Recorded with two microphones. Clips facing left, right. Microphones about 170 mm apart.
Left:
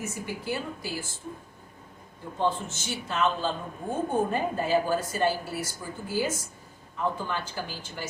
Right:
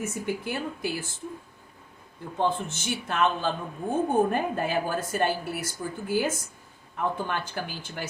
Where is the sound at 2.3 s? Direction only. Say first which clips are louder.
Right 1 dB; 55° right (ahead or behind).